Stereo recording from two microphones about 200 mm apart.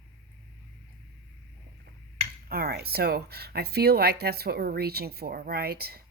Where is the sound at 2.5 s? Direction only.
50° right (ahead or behind).